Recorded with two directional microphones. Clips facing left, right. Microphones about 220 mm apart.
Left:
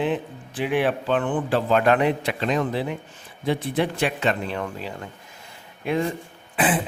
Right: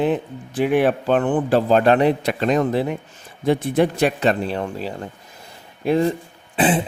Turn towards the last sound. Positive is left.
turn(degrees=-25)  # may be behind; listen again after turning